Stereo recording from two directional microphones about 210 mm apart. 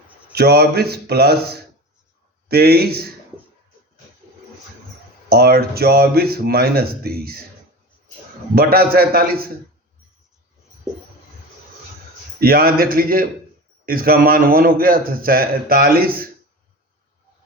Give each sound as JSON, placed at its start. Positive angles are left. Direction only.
{"t": 0.3, "sound": "a man's voice", "side_deg": -50}
{"t": 5.3, "sound": "a man's voice", "side_deg": -50}
{"t": 8.5, "sound": "a man's voice", "side_deg": -45}
{"t": 12.4, "sound": "a man's voice", "side_deg": -45}